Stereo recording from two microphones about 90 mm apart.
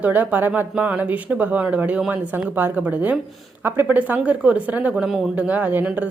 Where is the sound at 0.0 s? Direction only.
20° right (ahead or behind).